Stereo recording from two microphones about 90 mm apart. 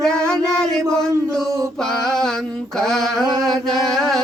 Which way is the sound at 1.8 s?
5° left (ahead or behind).